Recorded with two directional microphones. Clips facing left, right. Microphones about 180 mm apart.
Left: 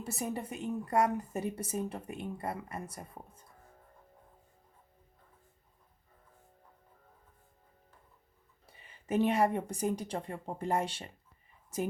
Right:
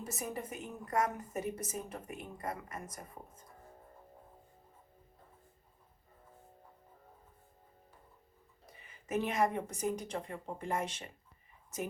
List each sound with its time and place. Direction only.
0.0 s a woman's voice: 30° left (ahead or behind)
8.6 s speech: 30° left (ahead or behind)